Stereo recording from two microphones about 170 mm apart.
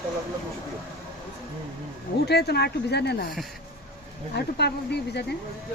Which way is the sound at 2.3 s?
75° left (ahead or behind).